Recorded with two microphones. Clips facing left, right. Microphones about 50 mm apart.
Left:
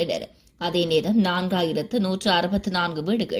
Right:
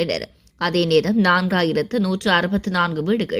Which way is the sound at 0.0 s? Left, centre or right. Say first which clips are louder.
Right 3 dB; right.